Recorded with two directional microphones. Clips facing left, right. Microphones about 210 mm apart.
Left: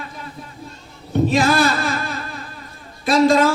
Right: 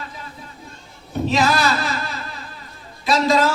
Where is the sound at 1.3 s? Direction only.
50° left (ahead or behind).